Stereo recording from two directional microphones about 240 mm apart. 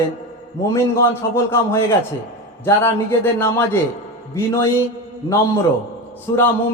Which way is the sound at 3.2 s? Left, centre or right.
Centre.